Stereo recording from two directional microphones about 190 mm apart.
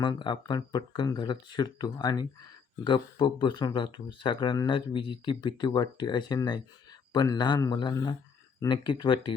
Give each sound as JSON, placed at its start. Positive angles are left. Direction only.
{"t": 0.0, "sound": "speech", "side_deg": 25}